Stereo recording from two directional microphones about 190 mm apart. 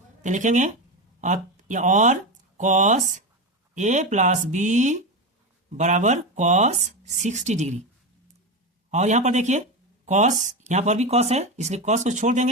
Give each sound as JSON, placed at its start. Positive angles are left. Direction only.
{"t": 0.2, "sound": "speech", "side_deg": -40}
{"t": 8.9, "sound": "speech", "side_deg": -40}